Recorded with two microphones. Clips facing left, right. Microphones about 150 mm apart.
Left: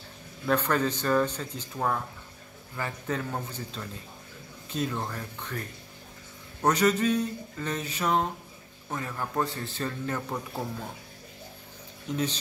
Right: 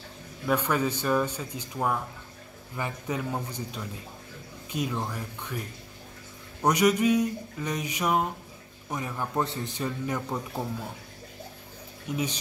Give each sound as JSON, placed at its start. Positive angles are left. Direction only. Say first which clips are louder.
{"t": 0.5, "sound": "speech", "louder": "even", "side_deg": -10}
{"t": 12.1, "sound": "speech", "louder": "left 1 dB", "side_deg": -10}